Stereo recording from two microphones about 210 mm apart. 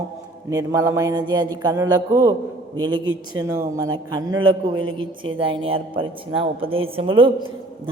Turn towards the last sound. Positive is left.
turn(degrees=-25)  # may be behind; listen again after turning